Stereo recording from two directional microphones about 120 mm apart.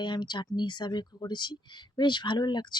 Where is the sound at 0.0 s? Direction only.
40° left (ahead or behind).